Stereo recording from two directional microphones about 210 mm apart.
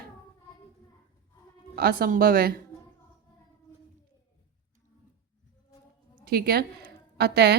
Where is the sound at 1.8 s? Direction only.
45° right (ahead or behind).